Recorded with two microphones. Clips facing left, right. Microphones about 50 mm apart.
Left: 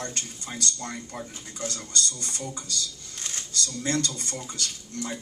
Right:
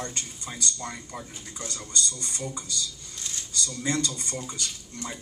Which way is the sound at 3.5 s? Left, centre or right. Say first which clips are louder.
Left 1 dB; right.